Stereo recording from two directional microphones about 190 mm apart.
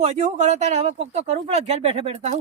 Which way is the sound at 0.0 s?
35° right (ahead or behind).